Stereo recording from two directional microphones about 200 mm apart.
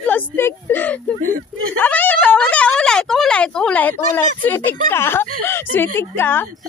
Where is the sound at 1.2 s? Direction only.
90° right.